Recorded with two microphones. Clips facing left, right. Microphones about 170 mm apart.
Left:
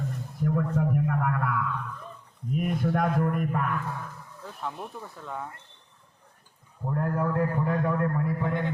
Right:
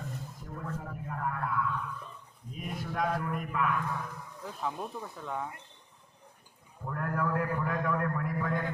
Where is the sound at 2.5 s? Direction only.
55° left (ahead or behind).